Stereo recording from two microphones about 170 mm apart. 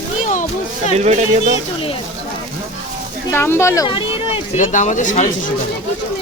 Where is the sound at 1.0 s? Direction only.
40° right (ahead or behind).